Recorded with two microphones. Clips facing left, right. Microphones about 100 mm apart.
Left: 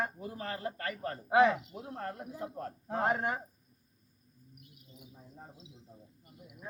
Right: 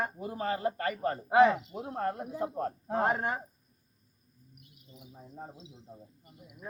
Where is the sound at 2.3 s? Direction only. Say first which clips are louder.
Right 7 dB; 65° right (ahead or behind).